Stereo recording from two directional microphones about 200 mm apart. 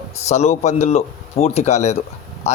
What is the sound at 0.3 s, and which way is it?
Speech, 35° left (ahead or behind).